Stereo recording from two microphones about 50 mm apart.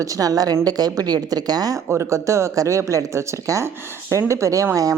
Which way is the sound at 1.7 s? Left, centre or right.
Right.